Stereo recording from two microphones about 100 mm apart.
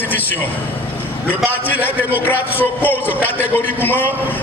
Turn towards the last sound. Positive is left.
turn(degrees=20)  # may be behind; listen again after turning